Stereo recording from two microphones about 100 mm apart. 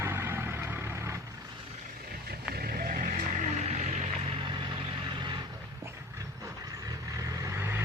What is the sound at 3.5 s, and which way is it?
Vehicle, 90° right.